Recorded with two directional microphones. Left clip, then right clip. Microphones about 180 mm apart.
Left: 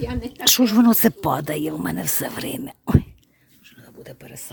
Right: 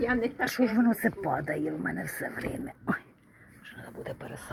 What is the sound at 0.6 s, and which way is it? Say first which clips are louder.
Speech: left 5 dB; 70° left (ahead or behind).